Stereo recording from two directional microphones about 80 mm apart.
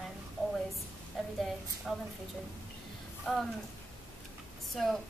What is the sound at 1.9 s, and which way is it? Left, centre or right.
Speech, centre.